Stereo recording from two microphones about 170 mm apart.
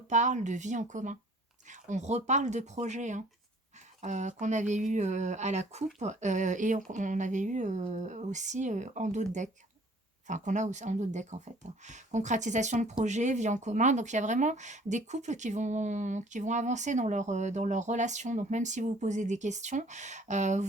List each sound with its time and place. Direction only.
0.1 s speech: 45° right (ahead or behind)